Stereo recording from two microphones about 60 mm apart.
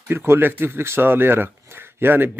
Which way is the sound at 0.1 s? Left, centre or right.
Right.